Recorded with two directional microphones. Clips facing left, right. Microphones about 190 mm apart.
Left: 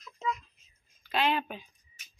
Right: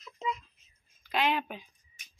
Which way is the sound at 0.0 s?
25° right (ahead or behind).